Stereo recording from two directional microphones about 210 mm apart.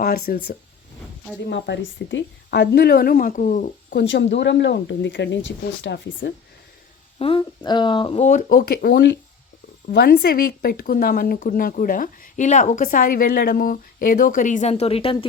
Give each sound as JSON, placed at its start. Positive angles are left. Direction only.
{"t": 0.0, "sound": "a woman's voice", "side_deg": 45}
{"t": 1.5, "sound": "a woman's voice", "side_deg": 55}
{"t": 3.9, "sound": "speech", "side_deg": 60}
{"t": 7.2, "sound": "speech", "side_deg": 25}